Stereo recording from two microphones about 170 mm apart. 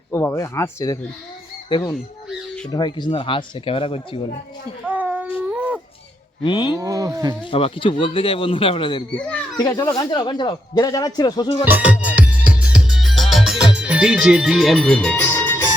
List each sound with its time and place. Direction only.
0.1 s a man's voice: 15° left (ahead or behind); by 4.3 s 30° left (ahead or behind)
4.9 s a sound: 10° right (ahead or behind)
6.4 s speech: 25° left (ahead or behind)
6.7 s speech: 20° right (ahead or behind)
7.5 s a man's voice: 30° left (ahead or behind)
11.6 s music: 10° right (ahead or behind)
13.7 s speech: 5° right (ahead or behind); by 15.7 s 10° left (ahead or behind)